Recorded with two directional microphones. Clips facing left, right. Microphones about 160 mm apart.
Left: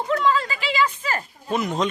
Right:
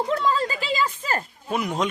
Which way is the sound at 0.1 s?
35° right (ahead or behind).